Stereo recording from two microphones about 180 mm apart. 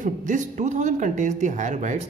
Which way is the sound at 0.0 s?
45° right (ahead or behind).